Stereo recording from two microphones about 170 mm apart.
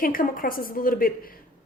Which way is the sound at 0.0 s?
55° left (ahead or behind).